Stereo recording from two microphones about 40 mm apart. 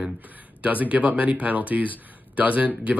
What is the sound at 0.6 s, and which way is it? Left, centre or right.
Speech, right.